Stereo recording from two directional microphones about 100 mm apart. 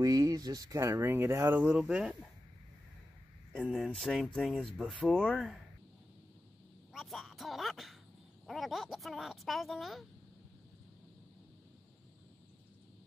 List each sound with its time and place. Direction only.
0.0 s speech: 35° right (ahead or behind)
0.9 s speech: 20° right (ahead or behind)
1.7 s speech: 5° right (ahead or behind)
3.7 s speech: centre (ahead or behind)
5.3 s speech: centre (ahead or behind)
6.9 s a sound: centre (ahead or behind)
8.5 s speech: centre (ahead or behind)